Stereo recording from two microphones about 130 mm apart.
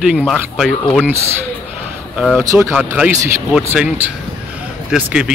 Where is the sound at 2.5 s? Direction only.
10° right (ahead or behind).